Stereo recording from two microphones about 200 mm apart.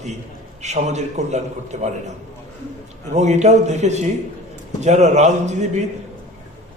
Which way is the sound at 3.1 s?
35° right (ahead or behind).